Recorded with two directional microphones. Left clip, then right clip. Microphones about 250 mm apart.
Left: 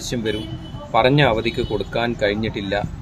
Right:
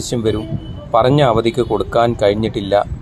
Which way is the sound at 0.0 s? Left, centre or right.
Right.